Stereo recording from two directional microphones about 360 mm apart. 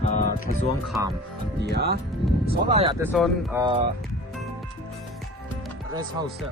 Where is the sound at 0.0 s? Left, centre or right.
Centre.